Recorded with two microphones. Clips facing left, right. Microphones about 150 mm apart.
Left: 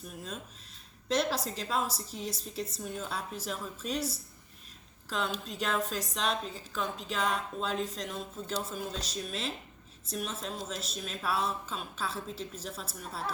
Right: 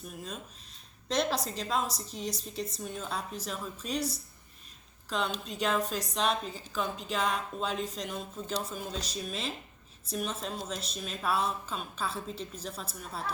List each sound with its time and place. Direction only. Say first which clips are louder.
1.0 s a woman's voice: even; 5° left (ahead or behind)